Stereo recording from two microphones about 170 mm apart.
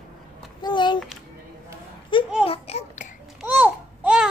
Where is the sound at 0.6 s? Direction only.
25° left (ahead or behind).